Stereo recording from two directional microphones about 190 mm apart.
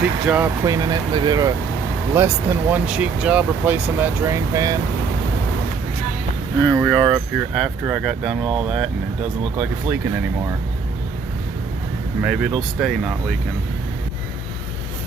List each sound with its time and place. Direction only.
0.3 s speech: 10° right (ahead or behind)
6.7 s speech: 10° right (ahead or behind)
12.2 s speech: 5° right (ahead or behind)